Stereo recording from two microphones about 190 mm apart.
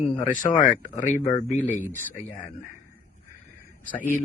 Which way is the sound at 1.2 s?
20° left (ahead or behind).